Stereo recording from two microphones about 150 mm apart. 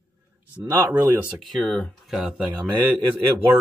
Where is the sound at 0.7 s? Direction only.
20° right (ahead or behind).